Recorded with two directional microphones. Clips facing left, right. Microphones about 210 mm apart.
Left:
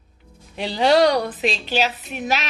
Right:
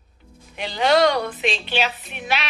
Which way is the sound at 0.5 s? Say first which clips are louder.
Left 2 dB; 35° left (ahead or behind).